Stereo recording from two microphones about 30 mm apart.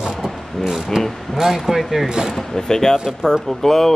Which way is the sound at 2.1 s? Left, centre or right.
Right.